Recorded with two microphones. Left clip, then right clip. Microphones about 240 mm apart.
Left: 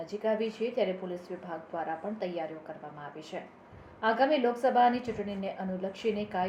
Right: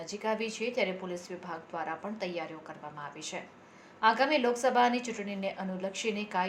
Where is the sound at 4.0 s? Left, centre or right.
Right.